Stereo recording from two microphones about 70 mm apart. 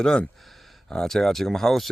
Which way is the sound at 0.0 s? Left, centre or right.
Centre.